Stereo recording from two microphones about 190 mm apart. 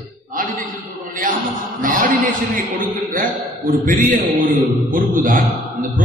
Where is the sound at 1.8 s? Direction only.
45° right (ahead or behind).